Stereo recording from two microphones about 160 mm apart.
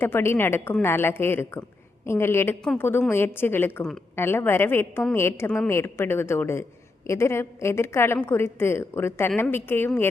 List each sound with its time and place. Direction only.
0.0 s a woman's voice: 15° left (ahead or behind)